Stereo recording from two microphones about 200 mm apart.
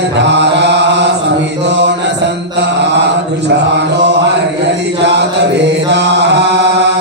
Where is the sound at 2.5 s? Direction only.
60° right (ahead or behind).